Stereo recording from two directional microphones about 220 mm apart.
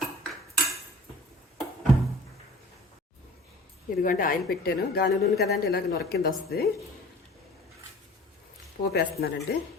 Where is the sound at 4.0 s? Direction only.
40° left (ahead or behind).